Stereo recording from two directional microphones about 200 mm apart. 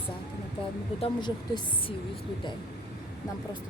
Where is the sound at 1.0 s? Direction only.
20° left (ahead or behind).